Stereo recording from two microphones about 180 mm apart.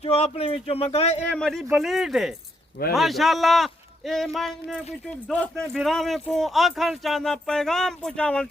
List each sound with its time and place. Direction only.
0.0 s speech: 35° left (ahead or behind)
1.3 s speech: 5° left (ahead or behind)